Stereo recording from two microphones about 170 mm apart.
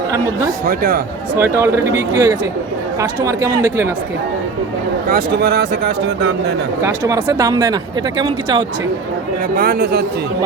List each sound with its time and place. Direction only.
0.6 s speech: 55° right (ahead or behind)
1.4 s speech: 15° right (ahead or behind)
5.0 s speech: 65° right (ahead or behind); by 6.3 s 85° right
6.8 s speech: 20° right (ahead or behind)
9.6 s speech: 65° right (ahead or behind)